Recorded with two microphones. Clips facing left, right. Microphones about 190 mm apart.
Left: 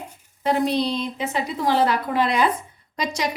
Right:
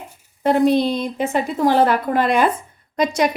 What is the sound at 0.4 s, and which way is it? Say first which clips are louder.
A woman's voice: right 6 dB; 50° right (ahead or behind).